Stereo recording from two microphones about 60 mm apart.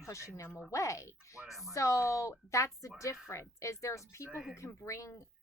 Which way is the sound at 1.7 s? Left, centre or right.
Left.